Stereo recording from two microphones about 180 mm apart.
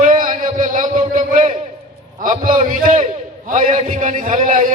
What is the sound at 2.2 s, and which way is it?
A man's voice, 50° right (ahead or behind).